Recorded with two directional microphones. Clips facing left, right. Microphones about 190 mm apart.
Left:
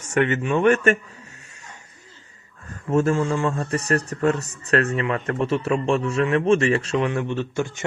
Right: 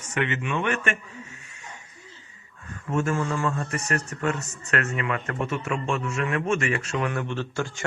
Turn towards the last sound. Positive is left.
turn(degrees=20)  # may be behind; listen again after turning